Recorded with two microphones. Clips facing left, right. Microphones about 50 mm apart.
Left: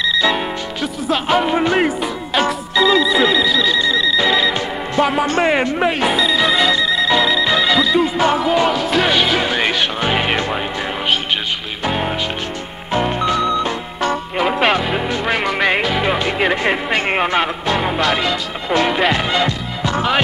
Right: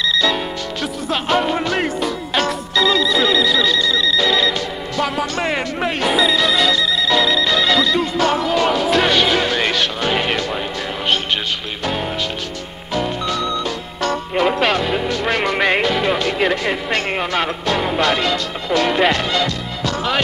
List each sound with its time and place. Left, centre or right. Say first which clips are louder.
0.1 s music: left 2 dB; centre
1.6 s music: left 3 dB; left
5.5 s speech: left 4 dB; centre
6.3 s music: left 1 dB; centre
8.6 s music: even; centre
11.8 s speech: left 3 dB; centre
12.9 s music: left 4 dB; left
14.0 s music: right 1 dB; centre
17.1 s speech: left 3 dB; left; by 19.2 s centre
19.3 s music: left 2 dB; centre